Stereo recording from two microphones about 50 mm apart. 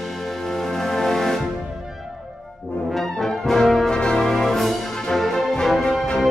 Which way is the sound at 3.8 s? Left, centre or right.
Centre.